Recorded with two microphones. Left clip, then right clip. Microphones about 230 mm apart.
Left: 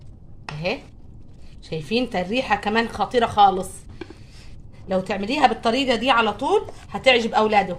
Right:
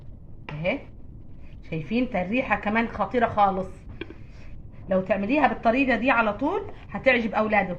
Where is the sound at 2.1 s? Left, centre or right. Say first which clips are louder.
Left 1 dB; left.